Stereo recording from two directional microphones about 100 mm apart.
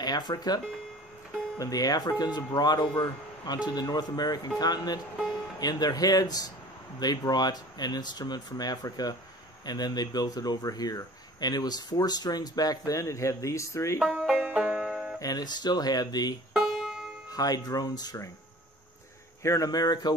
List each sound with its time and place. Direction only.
0.0 s speech: 45° left (ahead or behind)
1.6 s speech: 40° left (ahead or behind)
14.1 s banjo: 10° right (ahead or behind)
15.1 s speech: 40° left (ahead or behind)
16.5 s music: 5° right (ahead or behind)
17.3 s speech: 40° left (ahead or behind)
19.4 s speech: 35° left (ahead or behind)